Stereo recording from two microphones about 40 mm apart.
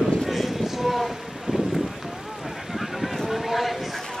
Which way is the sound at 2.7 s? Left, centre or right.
Centre.